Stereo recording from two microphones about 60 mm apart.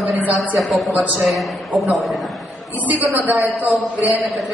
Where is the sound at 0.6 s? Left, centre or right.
Centre.